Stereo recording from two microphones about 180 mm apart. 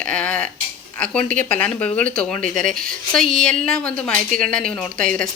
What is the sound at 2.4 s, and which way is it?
Speech, 45° right (ahead or behind).